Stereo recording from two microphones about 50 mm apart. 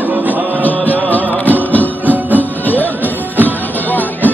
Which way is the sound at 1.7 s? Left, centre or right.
Left.